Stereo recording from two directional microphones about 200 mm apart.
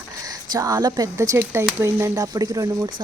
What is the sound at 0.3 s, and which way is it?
A woman's voice, 20° right (ahead or behind).